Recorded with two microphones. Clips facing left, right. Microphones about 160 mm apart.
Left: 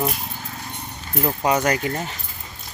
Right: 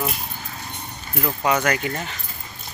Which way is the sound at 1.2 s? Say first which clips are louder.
Left 1 dB; 35° left (ahead or behind).